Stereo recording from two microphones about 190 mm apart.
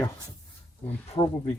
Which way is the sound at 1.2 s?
25° left (ahead or behind).